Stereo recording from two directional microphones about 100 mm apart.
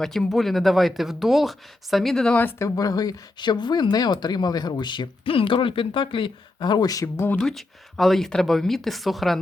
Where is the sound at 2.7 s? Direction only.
40° left (ahead or behind).